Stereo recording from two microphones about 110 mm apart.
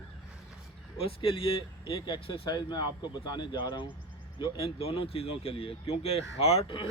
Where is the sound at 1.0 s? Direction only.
55° left (ahead or behind).